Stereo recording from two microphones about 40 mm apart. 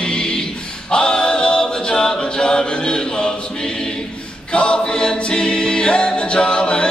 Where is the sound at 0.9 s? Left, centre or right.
Left.